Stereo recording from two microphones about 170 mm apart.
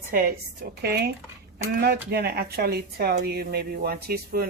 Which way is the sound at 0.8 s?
70° right (ahead or behind).